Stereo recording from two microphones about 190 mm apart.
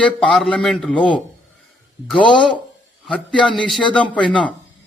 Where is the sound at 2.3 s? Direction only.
5° left (ahead or behind).